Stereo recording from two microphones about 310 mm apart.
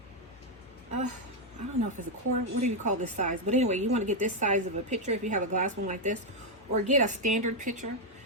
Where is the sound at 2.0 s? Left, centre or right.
Right.